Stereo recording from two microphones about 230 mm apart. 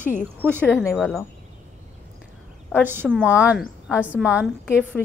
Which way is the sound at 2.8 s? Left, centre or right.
Centre.